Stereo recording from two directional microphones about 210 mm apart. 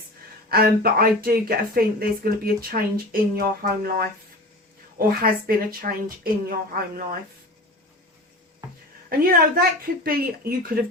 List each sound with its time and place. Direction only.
0.4 s a woman's voice: 45° right (ahead or behind)
9.0 s a woman's voice: 45° right (ahead or behind)